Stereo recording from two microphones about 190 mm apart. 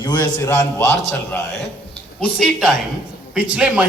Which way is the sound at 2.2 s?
5° left (ahead or behind).